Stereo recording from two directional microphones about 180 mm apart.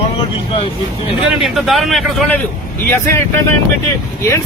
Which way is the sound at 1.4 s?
Centre (ahead or behind).